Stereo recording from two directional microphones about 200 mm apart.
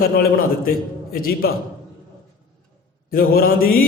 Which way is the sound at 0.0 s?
50° left (ahead or behind).